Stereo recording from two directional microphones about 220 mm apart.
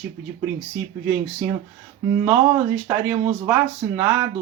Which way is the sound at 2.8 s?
10° right (ahead or behind).